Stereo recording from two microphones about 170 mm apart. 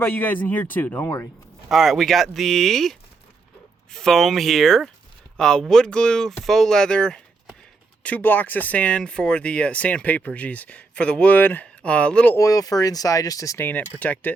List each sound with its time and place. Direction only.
0.0 s speech: 10° left (ahead or behind)
1.7 s speech: centre (ahead or behind)